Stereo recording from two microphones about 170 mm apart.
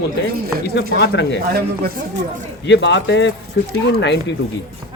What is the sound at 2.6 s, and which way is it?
Speech, 90° left.